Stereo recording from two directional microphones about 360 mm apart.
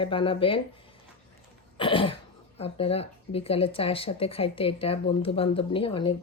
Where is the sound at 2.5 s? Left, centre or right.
Centre.